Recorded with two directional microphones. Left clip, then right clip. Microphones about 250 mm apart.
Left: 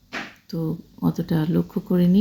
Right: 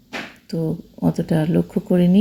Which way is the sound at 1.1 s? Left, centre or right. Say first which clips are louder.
Right 5 dB; centre.